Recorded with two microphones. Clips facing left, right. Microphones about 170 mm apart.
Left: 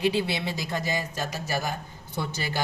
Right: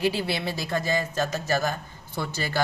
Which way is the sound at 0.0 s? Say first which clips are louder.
Even; 20° left (ahead or behind).